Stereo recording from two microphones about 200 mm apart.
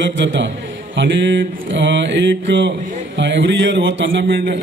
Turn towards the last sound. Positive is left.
turn(degrees=-50)  # may be behind; listen again after turning